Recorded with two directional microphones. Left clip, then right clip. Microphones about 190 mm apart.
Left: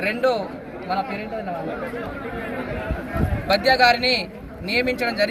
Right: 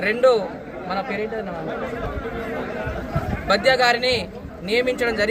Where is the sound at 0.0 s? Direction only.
Centre (ahead or behind).